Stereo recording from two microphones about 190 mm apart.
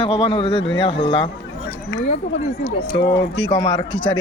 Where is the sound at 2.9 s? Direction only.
25° left (ahead or behind).